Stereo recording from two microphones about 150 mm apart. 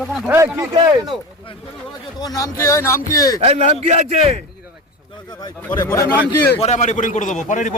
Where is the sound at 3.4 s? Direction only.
45° right (ahead or behind).